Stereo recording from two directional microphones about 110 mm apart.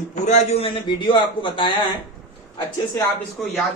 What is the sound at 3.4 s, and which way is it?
Speech, 5° left (ahead or behind).